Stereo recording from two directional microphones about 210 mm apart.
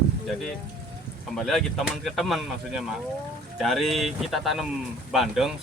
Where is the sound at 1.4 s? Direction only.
Centre (ahead or behind).